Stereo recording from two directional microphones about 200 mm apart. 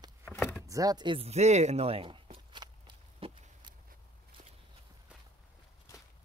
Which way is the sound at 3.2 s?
30° right (ahead or behind).